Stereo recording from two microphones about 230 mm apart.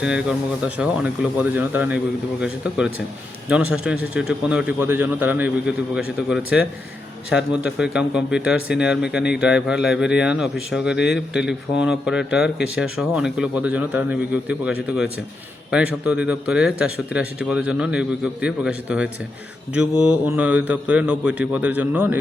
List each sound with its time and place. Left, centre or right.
0.0 s a man's voice: centre
10.9 s speech: left
11.3 s a man's voice: centre